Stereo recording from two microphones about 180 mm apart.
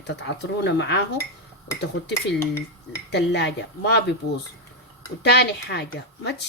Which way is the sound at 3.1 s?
70° left (ahead or behind).